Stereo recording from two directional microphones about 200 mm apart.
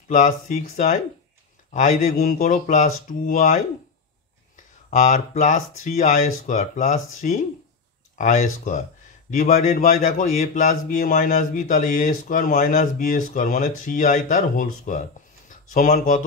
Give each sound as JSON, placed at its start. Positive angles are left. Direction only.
{"t": 0.1, "sound": "speech", "side_deg": 40}
{"t": 4.9, "sound": "speech", "side_deg": 40}